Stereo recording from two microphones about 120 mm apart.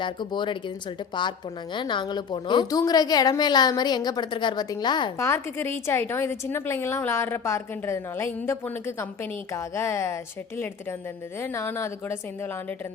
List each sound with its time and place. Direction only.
0.0 s a woman's voice: 40° left (ahead or behind)
1.7 s a woman's voice: 40° left (ahead or behind)
5.1 s a woman's voice: 20° left (ahead or behind)
11.3 s a woman's voice: 20° left (ahead or behind)